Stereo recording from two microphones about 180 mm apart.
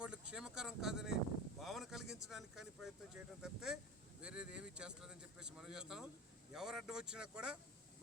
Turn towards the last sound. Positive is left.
turn(degrees=-5)  # may be behind; listen again after turning